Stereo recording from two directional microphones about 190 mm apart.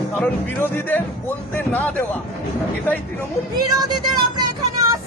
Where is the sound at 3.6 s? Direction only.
20° right (ahead or behind).